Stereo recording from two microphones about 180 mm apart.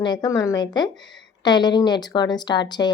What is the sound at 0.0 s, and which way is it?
Speech, 25° left (ahead or behind).